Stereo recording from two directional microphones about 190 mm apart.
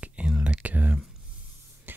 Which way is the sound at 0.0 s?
5° right (ahead or behind).